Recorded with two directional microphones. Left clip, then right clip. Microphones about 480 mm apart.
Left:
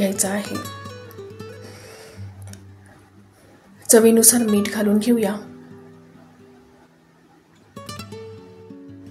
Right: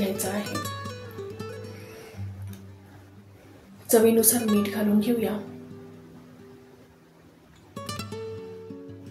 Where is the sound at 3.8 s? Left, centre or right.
Centre.